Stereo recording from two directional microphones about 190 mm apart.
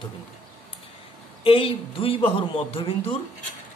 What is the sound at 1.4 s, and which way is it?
Speech, 30° left (ahead or behind).